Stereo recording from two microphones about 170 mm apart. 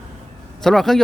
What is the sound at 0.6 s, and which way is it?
Speech, centre (ahead or behind).